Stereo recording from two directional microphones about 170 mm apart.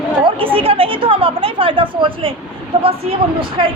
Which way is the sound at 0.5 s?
35° right (ahead or behind).